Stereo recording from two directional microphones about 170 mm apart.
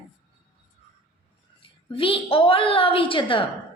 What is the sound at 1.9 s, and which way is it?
A woman's voice, 30° left (ahead or behind).